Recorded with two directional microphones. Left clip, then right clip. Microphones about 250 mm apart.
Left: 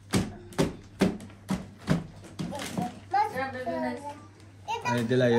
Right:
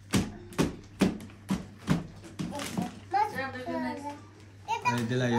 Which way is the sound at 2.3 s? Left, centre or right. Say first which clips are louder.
Left 1 dB; centre.